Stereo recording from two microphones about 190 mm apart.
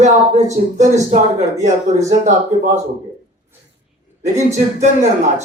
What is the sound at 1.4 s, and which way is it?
Speech, 15° right (ahead or behind).